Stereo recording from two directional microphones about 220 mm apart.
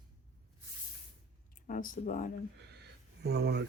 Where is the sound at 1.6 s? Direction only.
40° left (ahead or behind).